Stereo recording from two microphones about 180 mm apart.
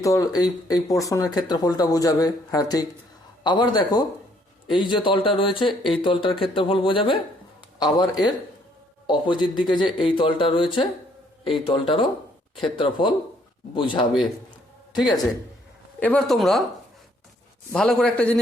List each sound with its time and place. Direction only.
0.0 s speech: 20° left (ahead or behind)
9.2 s speech: 25° left (ahead or behind)
16.0 s speech: 5° left (ahead or behind)
17.7 s a man's voice: 5° left (ahead or behind)